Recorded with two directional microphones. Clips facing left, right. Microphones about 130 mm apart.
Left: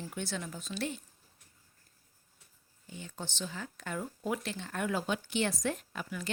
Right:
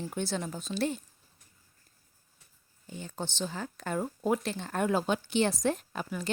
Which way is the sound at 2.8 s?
35° right (ahead or behind).